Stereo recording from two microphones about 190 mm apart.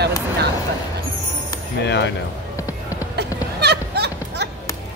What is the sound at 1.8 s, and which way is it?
Speech, 65° left (ahead or behind).